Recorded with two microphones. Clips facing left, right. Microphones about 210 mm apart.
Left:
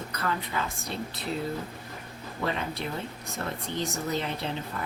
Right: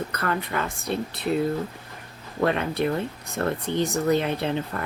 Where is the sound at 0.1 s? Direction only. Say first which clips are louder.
Right 4 dB; 60° right (ahead or behind).